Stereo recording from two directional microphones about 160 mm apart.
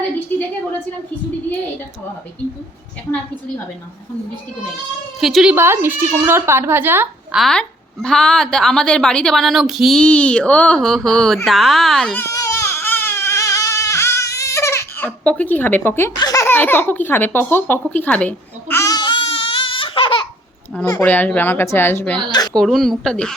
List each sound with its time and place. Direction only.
5.2 s a woman's voice: centre (ahead or behind)
5.5 s speech: 15° right (ahead or behind)
7.3 s a woman's voice: 5° left (ahead or behind)
12.2 s baby cry: 20° left (ahead or behind)
16.1 s baby laughter: 25° left (ahead or behind)
21.0 s a woman's voice: 10° left (ahead or behind)
22.3 s speech: 25° left (ahead or behind)
22.5 s a woman's voice: centre (ahead or behind)